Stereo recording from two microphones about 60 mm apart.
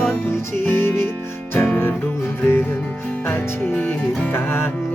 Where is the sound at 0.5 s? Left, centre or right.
Left.